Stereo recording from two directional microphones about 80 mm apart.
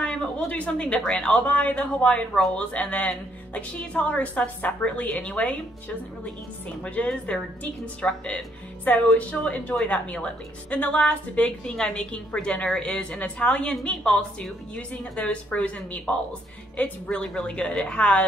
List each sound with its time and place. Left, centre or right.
0.0 s a sound: centre
0.5 s speech: centre
6.8 s speech: centre